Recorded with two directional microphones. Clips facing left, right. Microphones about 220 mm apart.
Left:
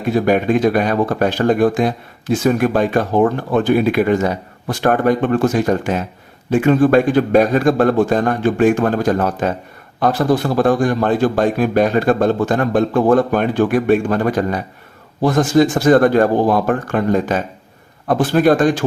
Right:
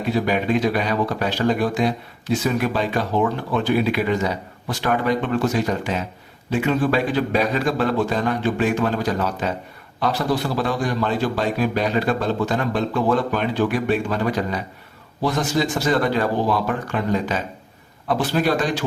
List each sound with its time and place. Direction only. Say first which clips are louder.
0.1 s speech: left 6 dB; 50° left (ahead or behind)